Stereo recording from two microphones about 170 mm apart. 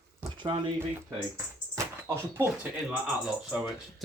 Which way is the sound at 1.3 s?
15° right (ahead or behind).